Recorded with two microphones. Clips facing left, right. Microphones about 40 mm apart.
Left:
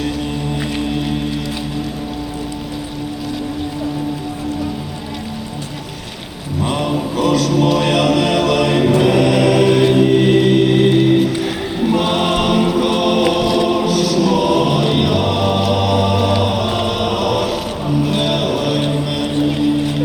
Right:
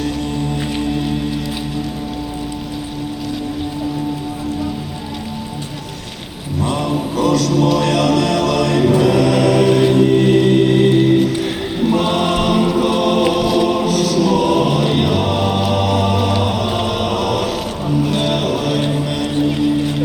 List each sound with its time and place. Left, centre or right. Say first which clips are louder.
6.7 s a sound: left 1 dB; left
7.8 s music: even; left
11.9 s choir: left 1 dB; left
13.1 s music: even; centre
13.5 s choir: even; centre
13.8 s choir: even; left
14.1 s choir: even; centre